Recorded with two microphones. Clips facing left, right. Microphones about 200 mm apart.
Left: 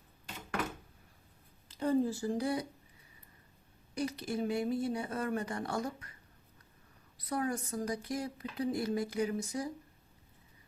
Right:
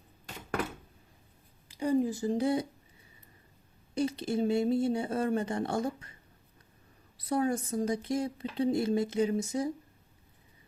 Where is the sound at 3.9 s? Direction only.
25° right (ahead or behind).